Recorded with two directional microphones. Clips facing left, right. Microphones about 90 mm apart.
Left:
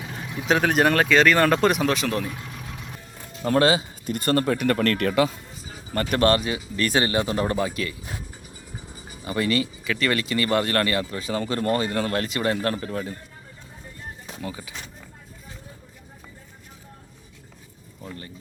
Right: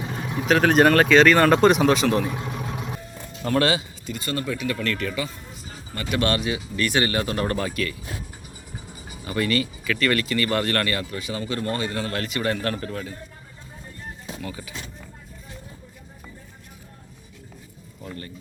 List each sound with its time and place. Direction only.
0.1 s vehicle: 35° right (ahead or behind)
0.6 s speech: 5° left (ahead or behind)
3.5 s speech: 35° left (ahead or behind)
4.0 s speech: 50° left (ahead or behind)
5.5 s music: centre (ahead or behind)
5.9 s speech: 45° left (ahead or behind); by 7.9 s 20° left (ahead or behind)
9.2 s speech: 25° left (ahead or behind)
14.4 s speech: 20° left (ahead or behind)